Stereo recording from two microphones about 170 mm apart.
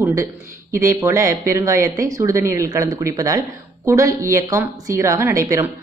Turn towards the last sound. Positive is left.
turn(degrees=-20)  # may be behind; listen again after turning